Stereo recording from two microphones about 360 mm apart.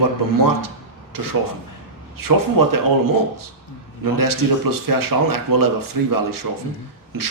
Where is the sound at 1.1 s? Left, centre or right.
Right.